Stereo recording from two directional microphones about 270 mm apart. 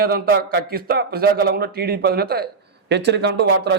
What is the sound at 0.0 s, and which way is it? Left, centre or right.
Speech, right.